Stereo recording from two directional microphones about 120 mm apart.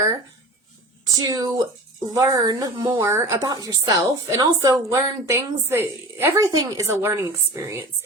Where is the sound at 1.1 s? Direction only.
30° right (ahead or behind).